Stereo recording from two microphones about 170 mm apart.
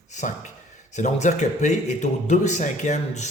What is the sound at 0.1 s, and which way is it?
Speech, 45° left (ahead or behind).